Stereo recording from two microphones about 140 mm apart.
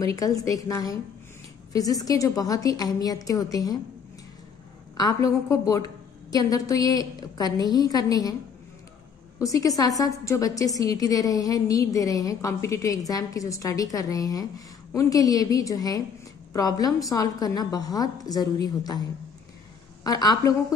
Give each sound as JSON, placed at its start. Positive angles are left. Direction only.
{"t": 0.0, "sound": "a woman's voice", "side_deg": 25}
{"t": 4.9, "sound": "a woman's voice", "side_deg": 25}
{"t": 9.4, "sound": "a woman's voice", "side_deg": 25}